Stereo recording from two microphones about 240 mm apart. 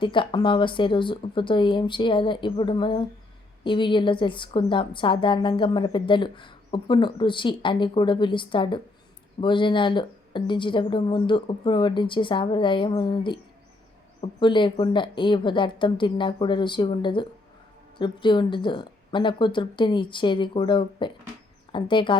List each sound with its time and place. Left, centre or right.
0.0 s a woman's voice: left